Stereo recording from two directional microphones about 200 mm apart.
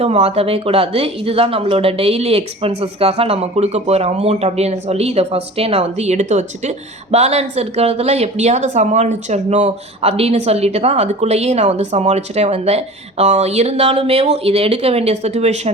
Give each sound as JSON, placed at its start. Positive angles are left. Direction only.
{"t": 0.0, "sound": "speech", "side_deg": -30}